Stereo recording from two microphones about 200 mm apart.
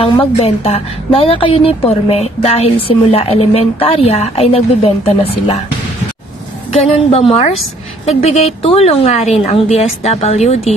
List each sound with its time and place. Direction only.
0.0 s a woman's voice: 30° left (ahead or behind)
6.7 s a woman's voice: 30° left (ahead or behind)